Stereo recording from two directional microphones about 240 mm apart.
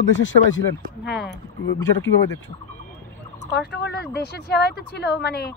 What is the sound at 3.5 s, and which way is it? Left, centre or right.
Speech, left.